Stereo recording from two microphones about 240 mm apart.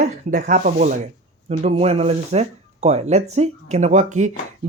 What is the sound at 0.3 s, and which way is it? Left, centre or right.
Speech, right.